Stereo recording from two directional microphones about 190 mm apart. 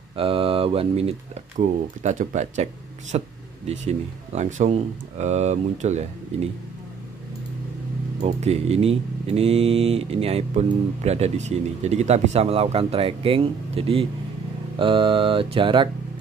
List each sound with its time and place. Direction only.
0.1 s mantra: 30° right (ahead or behind)
2.0 s speech: 40° right (ahead or behind)
8.2 s speech: 35° right (ahead or behind)
14.8 s mantra: 25° right (ahead or behind)